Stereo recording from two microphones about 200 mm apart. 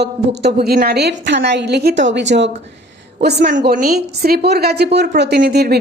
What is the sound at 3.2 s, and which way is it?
A woman's voice, 50° right (ahead or behind).